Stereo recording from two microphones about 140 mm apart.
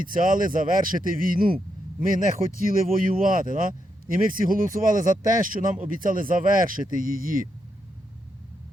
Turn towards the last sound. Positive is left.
turn(degrees=-80)